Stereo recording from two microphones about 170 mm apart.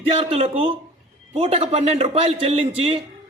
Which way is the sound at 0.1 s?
35° right (ahead or behind).